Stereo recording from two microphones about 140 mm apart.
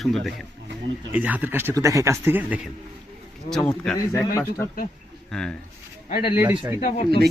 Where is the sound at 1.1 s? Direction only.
10° right (ahead or behind).